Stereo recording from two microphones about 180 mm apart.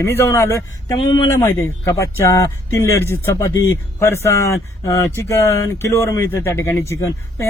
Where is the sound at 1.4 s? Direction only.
15° left (ahead or behind).